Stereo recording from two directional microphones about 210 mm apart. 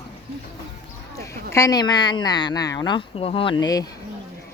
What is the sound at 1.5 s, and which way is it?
Speech, 15° left (ahead or behind).